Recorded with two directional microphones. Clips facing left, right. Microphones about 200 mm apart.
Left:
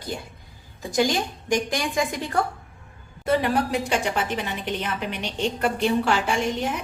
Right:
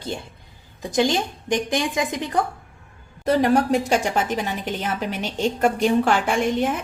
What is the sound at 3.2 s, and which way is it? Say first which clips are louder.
A woman's voice: right 4 dB; 45° right (ahead or behind).